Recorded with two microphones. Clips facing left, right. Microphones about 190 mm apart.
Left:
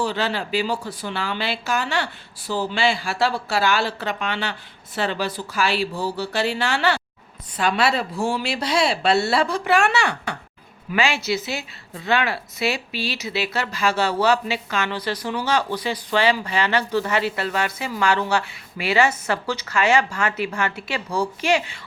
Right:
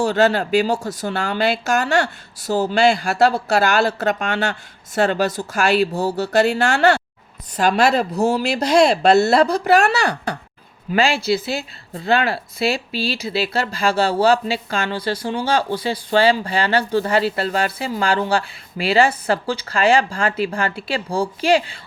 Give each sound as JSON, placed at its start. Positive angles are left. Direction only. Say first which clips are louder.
{"t": 0.0, "sound": "a woman's voice", "louder": "right 7 dB", "side_deg": -45}